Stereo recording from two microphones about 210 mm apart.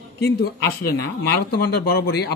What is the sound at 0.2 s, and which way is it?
Speech, 50° left (ahead or behind).